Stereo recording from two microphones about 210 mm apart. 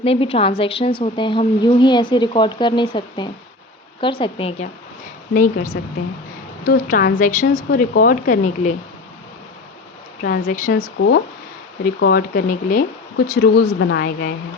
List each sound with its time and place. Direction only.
0.0 s a woman's voice: 25° left (ahead or behind)
5.3 s a woman's voice: 40° left (ahead or behind)
10.2 s speech: 40° left (ahead or behind)
11.9 s speech: 50° left (ahead or behind)